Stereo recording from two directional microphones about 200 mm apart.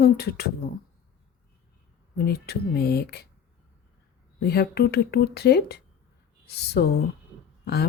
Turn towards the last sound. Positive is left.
turn(degrees=55)  # may be behind; listen again after turning